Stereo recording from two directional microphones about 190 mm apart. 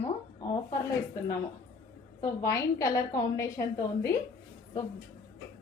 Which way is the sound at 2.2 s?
15° left (ahead or behind).